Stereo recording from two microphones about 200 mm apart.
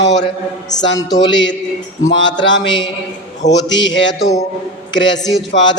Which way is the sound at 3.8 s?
65° left (ahead or behind).